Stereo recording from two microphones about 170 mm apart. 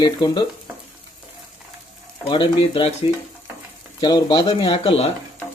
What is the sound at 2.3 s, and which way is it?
Speech, 30° left (ahead or behind).